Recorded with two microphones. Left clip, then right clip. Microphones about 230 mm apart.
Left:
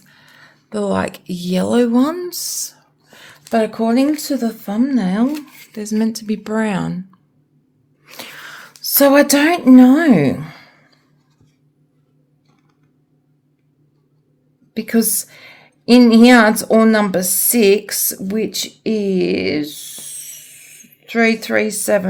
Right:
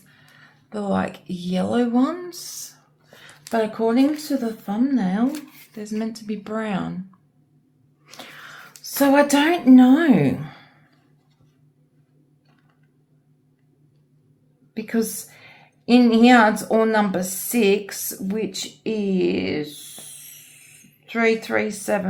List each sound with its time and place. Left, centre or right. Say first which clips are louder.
0.2 s speech: left 6 dB; left
8.0 s a sound: left 6 dB; left
8.8 s speech: left 6 dB; left
14.7 s a woman's voice: left 6 dB; left